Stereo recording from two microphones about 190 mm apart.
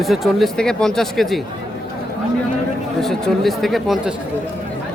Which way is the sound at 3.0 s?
Centre (ahead or behind).